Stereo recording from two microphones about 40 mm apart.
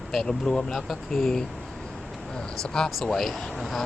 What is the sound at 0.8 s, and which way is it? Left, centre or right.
Speech, centre.